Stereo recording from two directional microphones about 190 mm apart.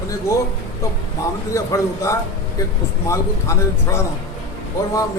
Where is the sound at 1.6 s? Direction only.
15° left (ahead or behind).